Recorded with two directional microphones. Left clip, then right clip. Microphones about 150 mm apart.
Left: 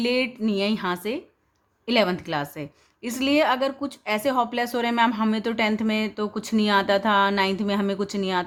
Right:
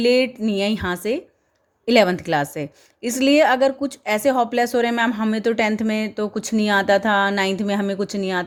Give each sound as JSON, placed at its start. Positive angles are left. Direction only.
{"t": 0.0, "sound": "a woman's voice", "side_deg": -25}